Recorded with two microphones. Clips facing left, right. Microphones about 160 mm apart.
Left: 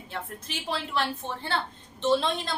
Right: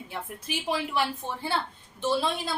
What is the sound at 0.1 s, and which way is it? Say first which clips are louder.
A woman's voice: right 1 dB; 15° right (ahead or behind).